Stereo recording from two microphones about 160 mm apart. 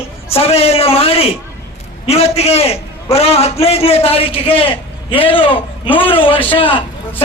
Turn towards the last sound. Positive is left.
turn(degrees=35)  # may be behind; listen again after turning